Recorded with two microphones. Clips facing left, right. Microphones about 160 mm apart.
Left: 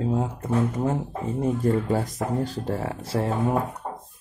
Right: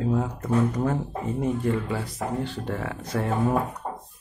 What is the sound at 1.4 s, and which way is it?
Speech, 40° left (ahead or behind).